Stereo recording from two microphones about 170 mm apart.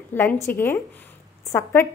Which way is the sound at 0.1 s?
15° left (ahead or behind).